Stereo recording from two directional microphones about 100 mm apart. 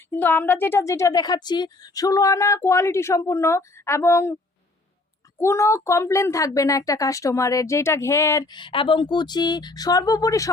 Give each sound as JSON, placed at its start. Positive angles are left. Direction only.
{"t": 0.1, "sound": "a woman's voice", "side_deg": 15}
{"t": 5.4, "sound": "speech", "side_deg": 30}
{"t": 8.4, "sound": "speech", "side_deg": 50}